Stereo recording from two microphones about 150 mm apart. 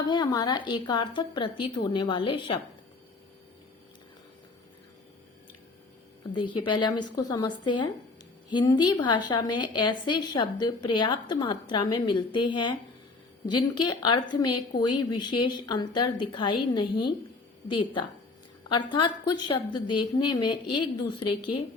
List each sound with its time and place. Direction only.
0.1 s speech: 25° left (ahead or behind)
6.3 s a woman's voice: 30° left (ahead or behind)
18.9 s speech: 30° left (ahead or behind)